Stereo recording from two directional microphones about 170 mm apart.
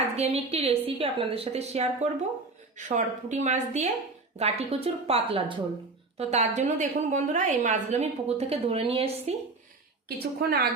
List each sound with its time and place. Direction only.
0.2 s a woman's voice: 40° right (ahead or behind)
10.1 s a woman's voice: 65° right (ahead or behind)